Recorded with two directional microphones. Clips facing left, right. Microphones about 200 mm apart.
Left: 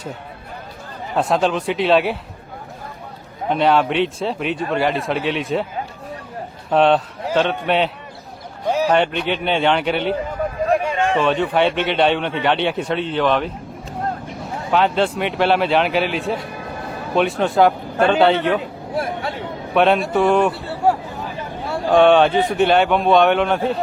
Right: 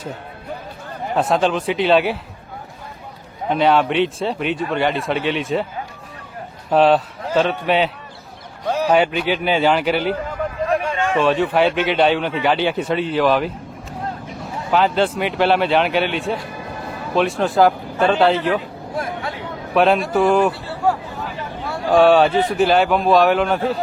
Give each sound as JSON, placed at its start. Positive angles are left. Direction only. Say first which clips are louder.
{"t": 1.1, "sound": "a man's voice", "louder": "even", "side_deg": 0}
{"t": 3.5, "sound": "a man's voice", "louder": "even", "side_deg": 0}
{"t": 6.7, "sound": "a man's voice", "louder": "right 1 dB", "side_deg": -5}
{"t": 8.6, "sound": "a sound", "louder": "left 2 dB", "side_deg": 10}
{"t": 8.9, "sound": "a man's voice", "louder": "right 5 dB", "side_deg": -5}
{"t": 10.8, "sound": "a sound", "louder": "left 2 dB", "side_deg": 10}
{"t": 11.2, "sound": "a man's voice", "louder": "right 3 dB", "side_deg": -5}
{"t": 14.3, "sound": "a sound", "louder": "left 1 dB", "side_deg": 0}
{"t": 14.6, "sound": "a man's voice", "louder": "even", "side_deg": 0}
{"t": 16.6, "sound": "music", "louder": "left 1 dB", "side_deg": 0}
{"t": 18.0, "sound": "a man's voice", "louder": "left 1 dB", "side_deg": 0}
{"t": 19.7, "sound": "a man's voice", "louder": "even", "side_deg": 0}
{"t": 20.7, "sound": "a sound", "louder": "left 2 dB", "side_deg": 20}
{"t": 21.8, "sound": "a man's voice", "louder": "even", "side_deg": 0}